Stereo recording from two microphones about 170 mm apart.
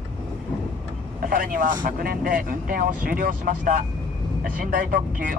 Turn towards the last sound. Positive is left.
turn(degrees=-55)  # may be behind; listen again after turning